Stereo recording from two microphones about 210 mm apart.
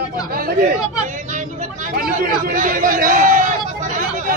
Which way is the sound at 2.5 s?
40° right (ahead or behind).